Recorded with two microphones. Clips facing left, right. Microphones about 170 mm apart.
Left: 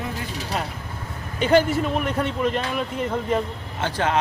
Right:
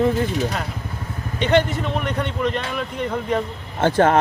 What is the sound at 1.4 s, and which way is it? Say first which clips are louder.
Speech: even; 5° left (ahead or behind).